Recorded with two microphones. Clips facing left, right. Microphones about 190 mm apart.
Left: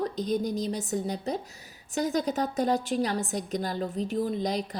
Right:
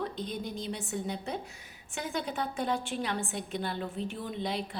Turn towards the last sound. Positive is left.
turn(degrees=40)  # may be behind; listen again after turning